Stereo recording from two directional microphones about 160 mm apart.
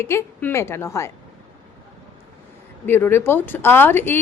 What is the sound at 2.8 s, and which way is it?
A woman's voice, 15° left (ahead or behind).